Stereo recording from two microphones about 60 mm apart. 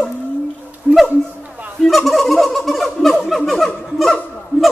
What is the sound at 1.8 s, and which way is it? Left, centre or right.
Fowl, centre.